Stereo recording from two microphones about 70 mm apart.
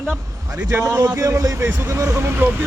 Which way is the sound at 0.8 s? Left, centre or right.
Right.